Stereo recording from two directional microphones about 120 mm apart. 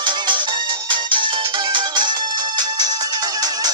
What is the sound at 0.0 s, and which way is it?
Music, 40° right (ahead or behind).